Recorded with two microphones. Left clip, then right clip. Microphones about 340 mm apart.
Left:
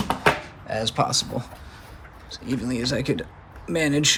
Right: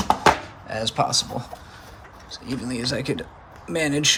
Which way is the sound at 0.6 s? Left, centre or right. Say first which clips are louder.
Even; centre.